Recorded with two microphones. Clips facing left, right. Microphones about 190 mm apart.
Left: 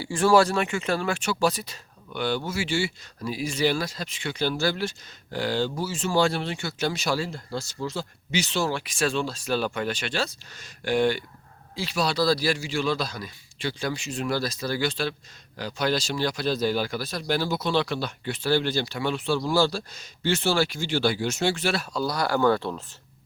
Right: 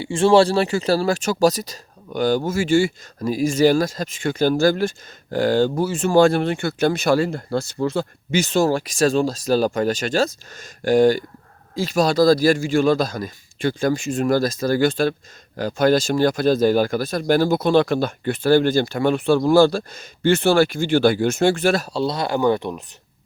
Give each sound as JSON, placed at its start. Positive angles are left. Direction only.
{"t": 0.0, "sound": "speech", "side_deg": -25}
{"t": 21.9, "sound": "speech", "side_deg": -25}